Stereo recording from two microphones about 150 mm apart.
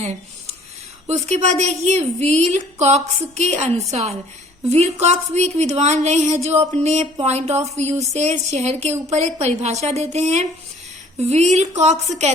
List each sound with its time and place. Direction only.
1.0 s a woman's voice: 50° right (ahead or behind)